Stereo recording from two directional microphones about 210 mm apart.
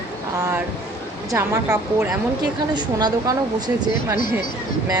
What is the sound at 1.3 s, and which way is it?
A woman's voice, 15° right (ahead or behind).